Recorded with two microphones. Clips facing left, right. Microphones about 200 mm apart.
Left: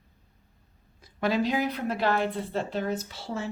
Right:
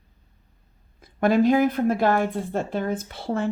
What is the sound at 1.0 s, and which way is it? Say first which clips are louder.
Speech: right 7 dB; 50° right (ahead or behind).